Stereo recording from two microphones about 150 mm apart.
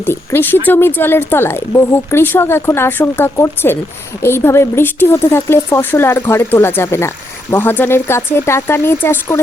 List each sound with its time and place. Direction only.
0.0 s speech: 15° left (ahead or behind)